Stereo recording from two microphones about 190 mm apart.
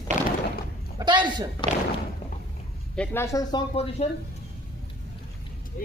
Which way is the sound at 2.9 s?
10° left (ahead or behind).